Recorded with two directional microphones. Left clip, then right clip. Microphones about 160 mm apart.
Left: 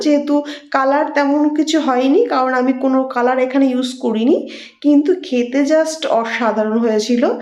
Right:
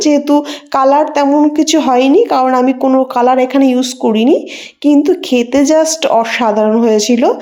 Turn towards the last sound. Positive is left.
turn(degrees=-30)  # may be behind; listen again after turning